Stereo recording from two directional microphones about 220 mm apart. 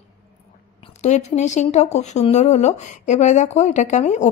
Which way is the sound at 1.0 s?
30° left (ahead or behind).